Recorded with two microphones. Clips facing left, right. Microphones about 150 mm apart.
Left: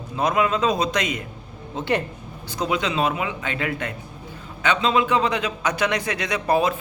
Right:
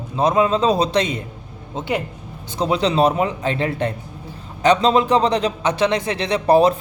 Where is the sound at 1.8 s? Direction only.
15° right (ahead or behind).